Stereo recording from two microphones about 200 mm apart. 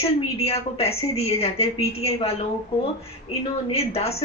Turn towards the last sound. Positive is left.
turn(degrees=30)  # may be behind; listen again after turning